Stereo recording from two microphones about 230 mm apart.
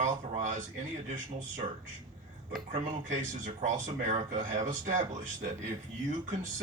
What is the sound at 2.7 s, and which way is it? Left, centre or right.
Speech, right.